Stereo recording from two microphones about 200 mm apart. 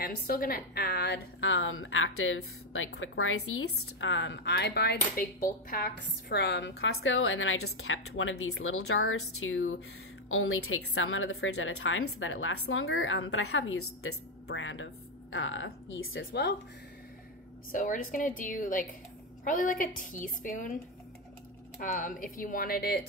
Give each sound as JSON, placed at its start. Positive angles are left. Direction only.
{"t": 0.0, "sound": "a woman's voice", "side_deg": 45}
{"t": 6.8, "sound": "a woman's voice", "side_deg": 85}
{"t": 17.6, "sound": "a woman's voice", "side_deg": 45}
{"t": 21.8, "sound": "speech", "side_deg": 40}